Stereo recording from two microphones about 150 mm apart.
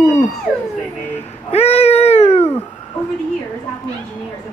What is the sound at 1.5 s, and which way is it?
Cat, 45° left (ahead or behind).